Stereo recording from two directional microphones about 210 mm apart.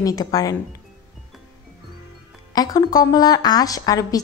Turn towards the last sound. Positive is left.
turn(degrees=15)  # may be behind; listen again after turning